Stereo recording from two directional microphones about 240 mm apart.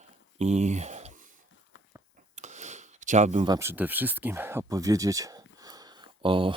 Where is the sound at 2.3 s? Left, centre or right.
Right.